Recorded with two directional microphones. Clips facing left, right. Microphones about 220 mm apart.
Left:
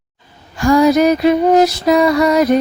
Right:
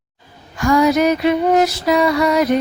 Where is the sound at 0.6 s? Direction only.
35° left (ahead or behind).